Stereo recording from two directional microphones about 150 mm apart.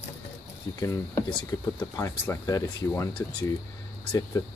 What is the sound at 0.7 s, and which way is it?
Speech, 20° left (ahead or behind).